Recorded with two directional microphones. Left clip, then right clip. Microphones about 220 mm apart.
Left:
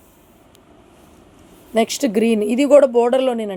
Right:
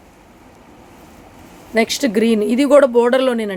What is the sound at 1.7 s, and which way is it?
Speech, 25° left (ahead or behind).